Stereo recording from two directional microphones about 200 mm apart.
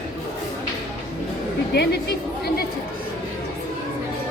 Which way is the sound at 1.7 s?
55° left (ahead or behind).